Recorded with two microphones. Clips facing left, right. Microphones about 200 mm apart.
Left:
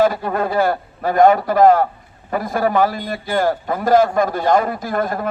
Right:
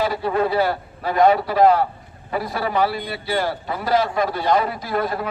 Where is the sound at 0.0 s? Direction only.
45° left (ahead or behind).